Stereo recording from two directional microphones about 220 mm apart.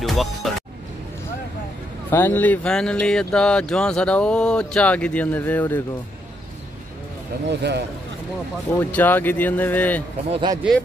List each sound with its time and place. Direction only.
0.0 s music: centre (ahead or behind)
2.0 s speech: 10° left (ahead or behind)
7.4 s speech: 50° right (ahead or behind)
8.7 s speech: 10° left (ahead or behind)
10.3 s speech: 20° right (ahead or behind)